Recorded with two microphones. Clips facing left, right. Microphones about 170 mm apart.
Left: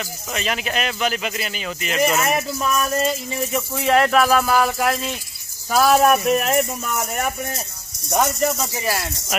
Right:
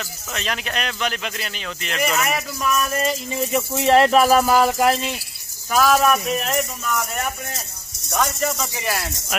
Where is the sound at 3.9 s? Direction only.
30° right (ahead or behind).